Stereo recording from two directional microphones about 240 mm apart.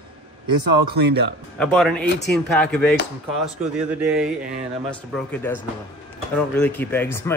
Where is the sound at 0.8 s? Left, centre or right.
Right.